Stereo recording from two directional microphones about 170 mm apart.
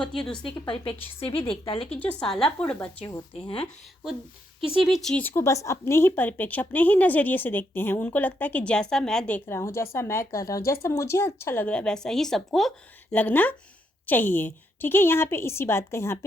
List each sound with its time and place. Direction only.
0.1 s a woman's voice: 5° left (ahead or behind)
0.6 s a woman's voice: 30° left (ahead or behind)
2.0 s a woman's voice: 5° left (ahead or behind)
3.3 s a woman's voice: 30° left (ahead or behind)
4.8 s a woman's voice: centre (ahead or behind)